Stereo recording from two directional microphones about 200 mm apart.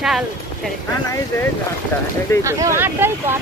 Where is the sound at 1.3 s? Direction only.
15° left (ahead or behind).